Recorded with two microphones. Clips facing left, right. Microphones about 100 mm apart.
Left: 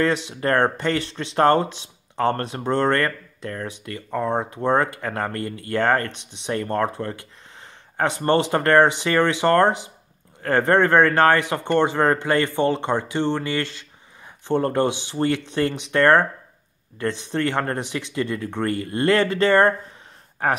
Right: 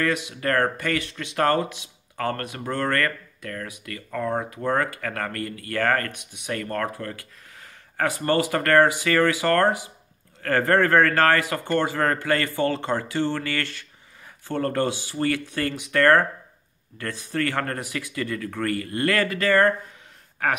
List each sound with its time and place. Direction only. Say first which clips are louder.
0.0 s speech: left 3 dB; 30° left (ahead or behind)
8.3 s speech: left 3 dB; 25° left (ahead or behind)